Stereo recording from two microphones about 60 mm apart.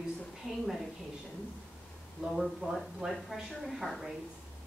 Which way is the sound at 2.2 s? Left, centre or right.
Centre.